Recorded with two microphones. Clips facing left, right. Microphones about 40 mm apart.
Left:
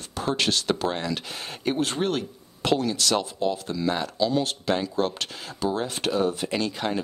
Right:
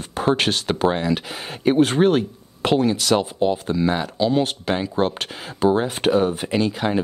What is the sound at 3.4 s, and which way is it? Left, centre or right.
Speech, right.